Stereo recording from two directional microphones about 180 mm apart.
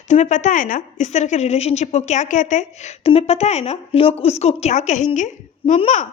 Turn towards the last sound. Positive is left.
turn(degrees=40)  # may be behind; listen again after turning